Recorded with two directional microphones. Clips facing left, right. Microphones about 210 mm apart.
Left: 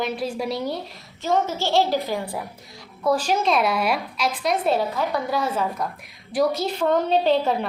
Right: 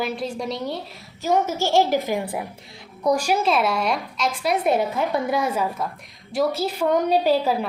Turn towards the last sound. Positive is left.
turn(degrees=-5)  # may be behind; listen again after turning